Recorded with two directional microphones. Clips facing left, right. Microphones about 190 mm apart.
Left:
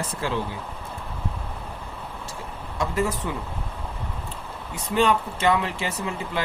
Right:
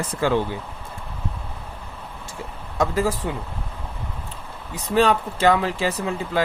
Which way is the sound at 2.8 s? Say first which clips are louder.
Right 4 dB; 35° right (ahead or behind).